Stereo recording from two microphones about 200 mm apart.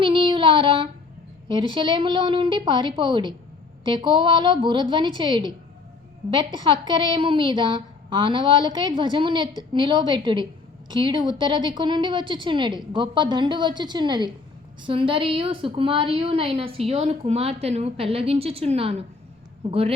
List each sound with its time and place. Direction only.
0.0 s child singing: 25° right (ahead or behind)
1.5 s a woman's voice: 25° right (ahead or behind)